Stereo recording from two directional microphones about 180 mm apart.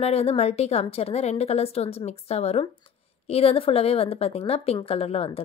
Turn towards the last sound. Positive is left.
turn(degrees=30)  # may be behind; listen again after turning